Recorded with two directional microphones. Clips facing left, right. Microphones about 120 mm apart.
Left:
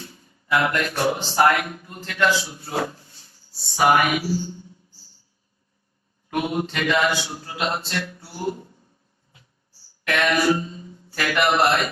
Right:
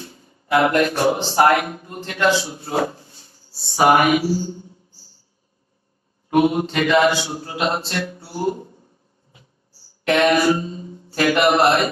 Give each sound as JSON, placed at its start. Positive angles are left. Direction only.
{"t": 0.0, "sound": "a man's voice", "side_deg": -25}
{"t": 6.3, "sound": "a man's voice", "side_deg": -25}
{"t": 10.0, "sound": "speech", "side_deg": -25}